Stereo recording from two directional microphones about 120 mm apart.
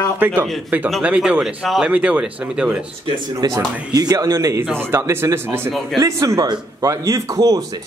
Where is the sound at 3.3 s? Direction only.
30° right (ahead or behind).